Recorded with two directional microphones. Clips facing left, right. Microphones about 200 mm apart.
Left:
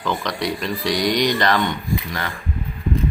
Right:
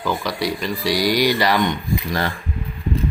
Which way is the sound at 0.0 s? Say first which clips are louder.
Right 1 dB; 5° right (ahead or behind).